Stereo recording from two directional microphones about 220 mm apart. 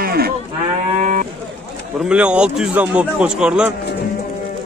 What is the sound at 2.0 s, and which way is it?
A man's voice, 5° right (ahead or behind).